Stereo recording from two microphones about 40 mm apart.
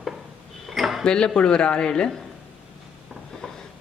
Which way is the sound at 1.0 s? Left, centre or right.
Left.